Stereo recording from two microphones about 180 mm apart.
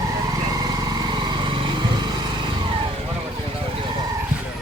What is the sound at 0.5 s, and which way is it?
Vehicle, 20° right (ahead or behind).